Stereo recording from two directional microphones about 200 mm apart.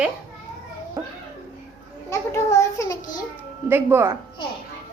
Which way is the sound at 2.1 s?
15° left (ahead or behind).